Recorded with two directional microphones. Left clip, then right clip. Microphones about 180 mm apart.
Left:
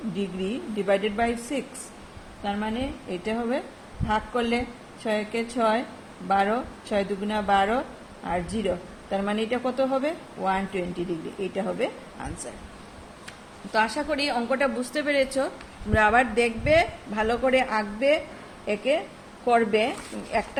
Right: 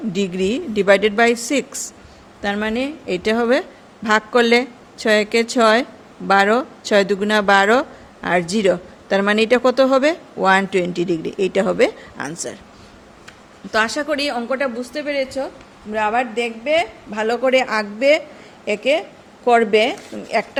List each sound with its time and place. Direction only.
0.2 s a man's voice: 55° right (ahead or behind)
13.7 s speech: 45° right (ahead or behind); by 14.7 s 25° right (ahead or behind)
14.8 s a woman's voice: 5° right (ahead or behind)
17.1 s speech: 25° right (ahead or behind)